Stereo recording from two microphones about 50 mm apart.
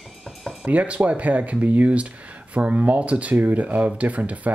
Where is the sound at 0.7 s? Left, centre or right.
Right.